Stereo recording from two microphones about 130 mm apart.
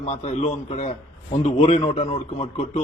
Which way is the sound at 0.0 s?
55° left (ahead or behind).